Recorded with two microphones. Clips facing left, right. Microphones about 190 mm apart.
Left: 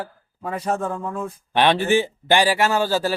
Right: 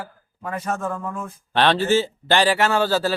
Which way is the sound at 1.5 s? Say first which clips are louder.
Even; 15° left (ahead or behind).